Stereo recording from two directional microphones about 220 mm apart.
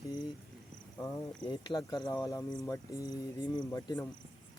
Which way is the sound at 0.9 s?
15° left (ahead or behind).